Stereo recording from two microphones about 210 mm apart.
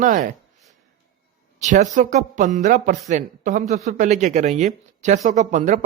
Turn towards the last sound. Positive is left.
turn(degrees=-35)  # may be behind; listen again after turning